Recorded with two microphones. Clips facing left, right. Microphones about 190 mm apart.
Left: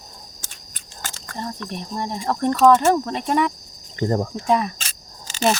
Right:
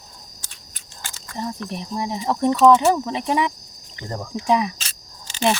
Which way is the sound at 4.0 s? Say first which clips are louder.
Left 10 dB; 45° left (ahead or behind).